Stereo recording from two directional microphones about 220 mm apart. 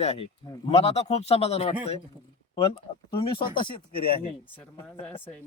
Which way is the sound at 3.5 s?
20° left (ahead or behind).